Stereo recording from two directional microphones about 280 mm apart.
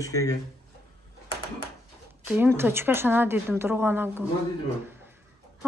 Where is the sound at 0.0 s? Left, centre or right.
Centre.